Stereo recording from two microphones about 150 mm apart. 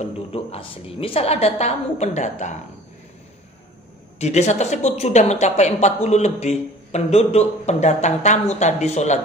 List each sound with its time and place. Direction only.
0.0 s a woman's voice: 40° left (ahead or behind)
4.2 s a woman's voice: 50° left (ahead or behind)